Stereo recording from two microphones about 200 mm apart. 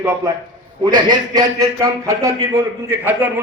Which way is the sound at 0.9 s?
20° right (ahead or behind).